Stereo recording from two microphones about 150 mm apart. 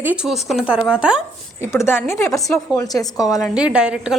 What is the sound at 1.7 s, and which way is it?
A woman's voice, 15° left (ahead or behind).